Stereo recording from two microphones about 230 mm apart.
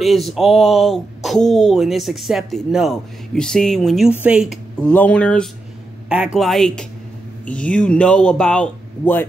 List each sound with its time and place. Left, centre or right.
0.0 s speech: centre